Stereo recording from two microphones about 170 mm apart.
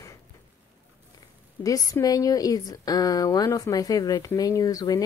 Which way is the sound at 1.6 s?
20° left (ahead or behind).